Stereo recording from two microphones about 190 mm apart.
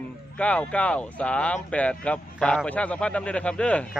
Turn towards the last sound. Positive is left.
turn(degrees=5)  # may be behind; listen again after turning